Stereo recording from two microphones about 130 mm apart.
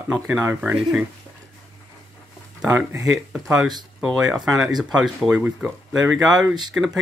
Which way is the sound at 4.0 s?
5° right (ahead or behind).